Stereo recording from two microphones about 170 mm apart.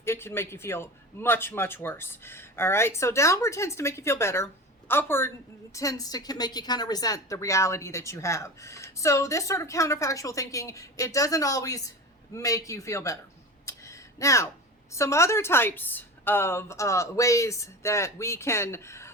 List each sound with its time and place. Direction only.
0.0 s a man's voice: 15° left (ahead or behind)
13.7 s a sound: 15° left (ahead or behind)
14.9 s a man's voice: 15° left (ahead or behind)